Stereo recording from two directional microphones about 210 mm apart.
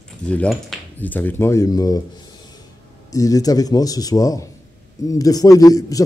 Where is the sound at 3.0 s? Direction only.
15° left (ahead or behind).